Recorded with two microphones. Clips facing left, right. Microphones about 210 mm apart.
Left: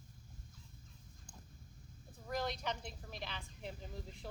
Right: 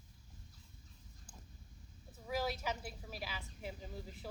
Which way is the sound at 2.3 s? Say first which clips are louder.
Right 1 dB; 5° right (ahead or behind).